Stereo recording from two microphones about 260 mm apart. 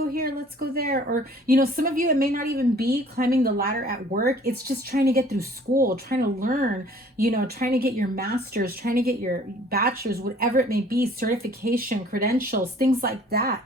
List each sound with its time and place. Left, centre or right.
0.1 s a woman's voice: right